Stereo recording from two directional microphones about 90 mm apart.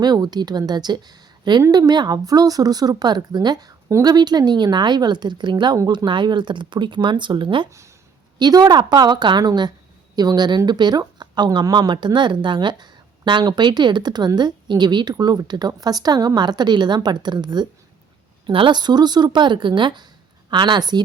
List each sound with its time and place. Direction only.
0.0 s speech: 50° right (ahead or behind)
8.4 s speech: 50° right (ahead or behind)